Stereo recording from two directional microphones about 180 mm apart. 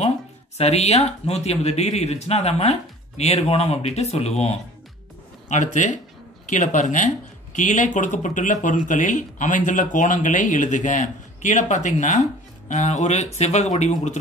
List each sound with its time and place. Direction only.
0.6 s speech: 35° left (ahead or behind)